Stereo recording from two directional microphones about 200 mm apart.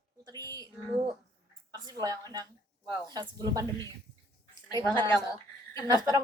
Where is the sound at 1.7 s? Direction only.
20° right (ahead or behind).